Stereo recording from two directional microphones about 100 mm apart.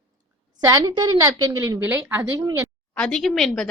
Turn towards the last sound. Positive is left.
turn(degrees=5)  # may be behind; listen again after turning